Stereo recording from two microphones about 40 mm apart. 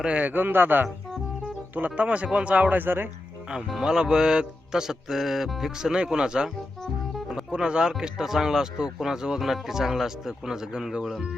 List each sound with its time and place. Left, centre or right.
0.0 s speech: right
2.0 s speech: right
2.7 s speech: right
3.8 s music: centre
6.0 s speech: centre
7.5 s music: right